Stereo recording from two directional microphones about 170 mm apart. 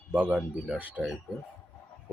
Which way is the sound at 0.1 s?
10° right (ahead or behind).